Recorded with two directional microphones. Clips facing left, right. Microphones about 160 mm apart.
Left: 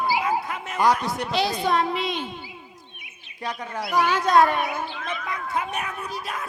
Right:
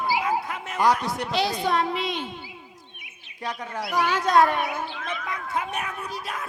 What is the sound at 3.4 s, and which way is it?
Speech, 10° left (ahead or behind).